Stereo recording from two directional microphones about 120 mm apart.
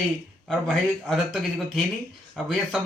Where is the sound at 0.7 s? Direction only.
5° left (ahead or behind).